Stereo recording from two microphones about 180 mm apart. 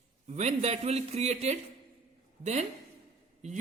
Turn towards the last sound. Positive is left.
turn(degrees=-40)  # may be behind; listen again after turning